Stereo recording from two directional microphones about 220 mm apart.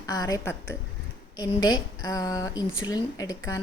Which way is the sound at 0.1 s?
15° left (ahead or behind).